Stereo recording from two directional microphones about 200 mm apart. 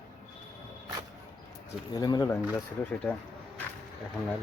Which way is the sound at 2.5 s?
5° left (ahead or behind).